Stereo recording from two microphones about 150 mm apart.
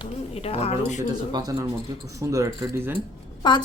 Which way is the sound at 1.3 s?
25° right (ahead or behind).